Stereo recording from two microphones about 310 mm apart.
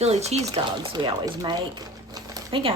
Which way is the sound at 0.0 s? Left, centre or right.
Right.